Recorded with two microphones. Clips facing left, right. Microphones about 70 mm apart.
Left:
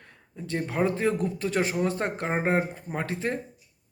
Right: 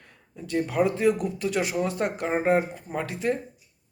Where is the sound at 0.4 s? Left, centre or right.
Left.